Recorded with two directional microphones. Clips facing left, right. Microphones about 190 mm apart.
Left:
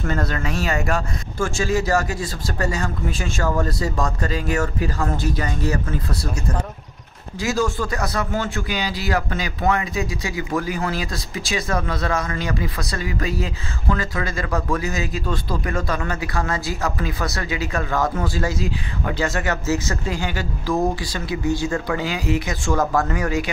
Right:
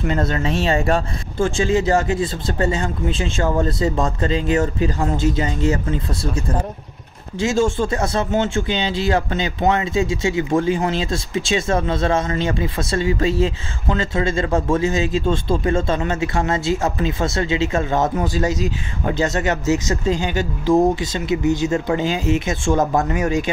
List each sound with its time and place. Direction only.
0.0 s speech: 20° right (ahead or behind)
7.3 s speech: 25° right (ahead or behind)